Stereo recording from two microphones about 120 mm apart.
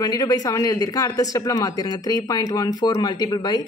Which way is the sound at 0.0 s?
30° left (ahead or behind).